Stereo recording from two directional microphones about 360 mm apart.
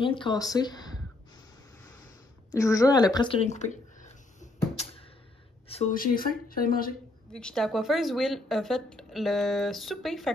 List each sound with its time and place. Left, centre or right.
0.1 s speech: centre
2.5 s a sound: centre
5.7 s speech: centre
7.3 s speech: centre